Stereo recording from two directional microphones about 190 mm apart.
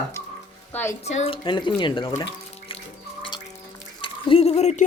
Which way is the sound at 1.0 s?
30° left (ahead or behind).